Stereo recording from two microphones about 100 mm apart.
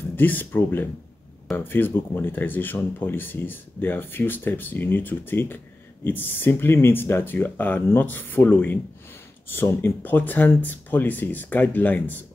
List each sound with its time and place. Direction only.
0.1 s speech: 20° left (ahead or behind)